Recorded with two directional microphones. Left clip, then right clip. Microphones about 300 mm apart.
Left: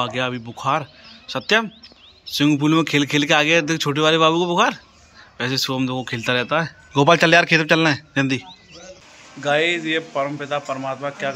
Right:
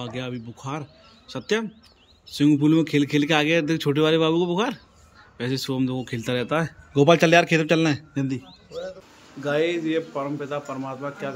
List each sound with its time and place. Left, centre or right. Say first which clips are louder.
0.0 s speech: left 10 dB; centre